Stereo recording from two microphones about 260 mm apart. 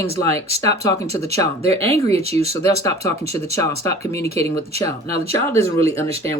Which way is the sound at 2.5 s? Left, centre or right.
Centre.